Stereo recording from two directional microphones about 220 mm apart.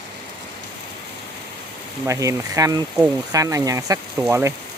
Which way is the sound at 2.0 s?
15° right (ahead or behind).